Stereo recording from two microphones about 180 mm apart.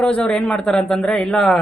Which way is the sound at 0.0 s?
5° left (ahead or behind).